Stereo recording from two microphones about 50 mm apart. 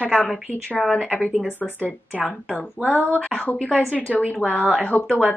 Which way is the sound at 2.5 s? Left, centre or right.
Left.